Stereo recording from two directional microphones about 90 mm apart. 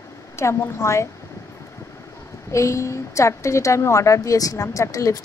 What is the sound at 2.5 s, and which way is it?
A woman's voice, 35° left (ahead or behind).